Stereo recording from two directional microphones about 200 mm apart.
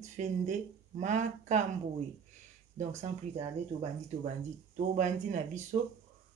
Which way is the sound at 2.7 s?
35° right (ahead or behind).